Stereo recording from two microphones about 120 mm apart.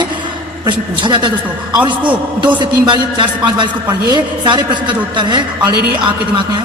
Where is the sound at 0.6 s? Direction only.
40° right (ahead or behind).